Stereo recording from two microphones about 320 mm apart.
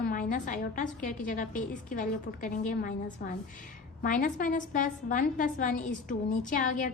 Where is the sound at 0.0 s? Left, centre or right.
Left.